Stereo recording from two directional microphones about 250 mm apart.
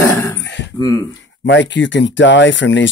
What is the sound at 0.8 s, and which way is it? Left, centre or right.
Groan, centre.